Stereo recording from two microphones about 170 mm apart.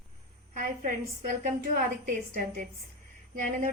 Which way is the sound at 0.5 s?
55° right (ahead or behind).